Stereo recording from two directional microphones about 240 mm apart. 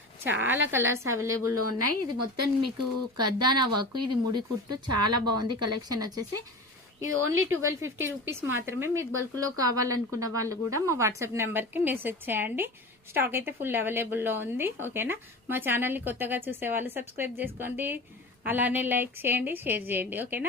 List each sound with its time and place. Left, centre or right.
0.7 s speech: centre
1.5 s speech: right
4.0 s speech: centre
4.9 s speech: right
6.0 s speech: centre
7.1 s speech: right
7.6 s speech: centre